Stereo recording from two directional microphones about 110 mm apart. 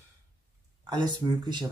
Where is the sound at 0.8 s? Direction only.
40° right (ahead or behind).